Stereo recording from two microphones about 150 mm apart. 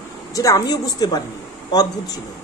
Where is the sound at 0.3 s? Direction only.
20° left (ahead or behind).